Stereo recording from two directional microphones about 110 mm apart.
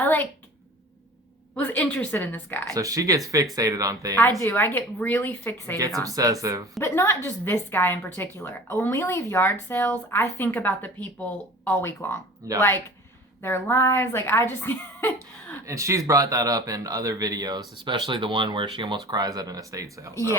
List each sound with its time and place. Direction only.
0.0 s a sound: 15° left (ahead or behind)
1.5 s a woman's voice: 15° left (ahead or behind)
2.7 s speech: 30° right (ahead or behind)
4.1 s a woman's voice: 20° left (ahead or behind)
6.1 s speech: 30° right (ahead or behind)
6.7 s a woman's voice: 25° left (ahead or behind)
15.6 s speech: 30° right (ahead or behind); by 18.9 s 50° right (ahead or behind)
19.0 s speech: 35° right (ahead or behind)